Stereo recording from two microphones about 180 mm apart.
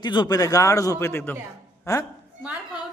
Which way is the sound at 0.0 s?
25° left (ahead or behind).